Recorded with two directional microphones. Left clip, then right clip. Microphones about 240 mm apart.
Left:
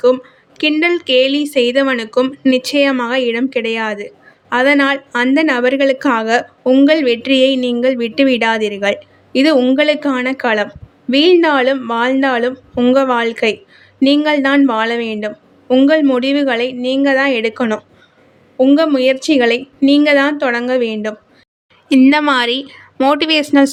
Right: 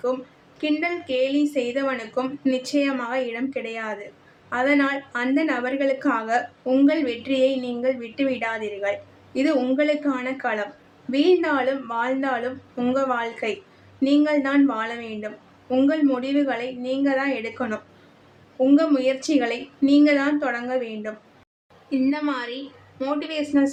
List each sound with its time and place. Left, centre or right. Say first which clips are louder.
0.6 s a woman's voice: left 11 dB; left